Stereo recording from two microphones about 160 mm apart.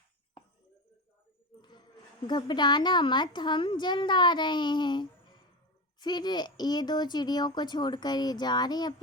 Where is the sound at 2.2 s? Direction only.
25° left (ahead or behind).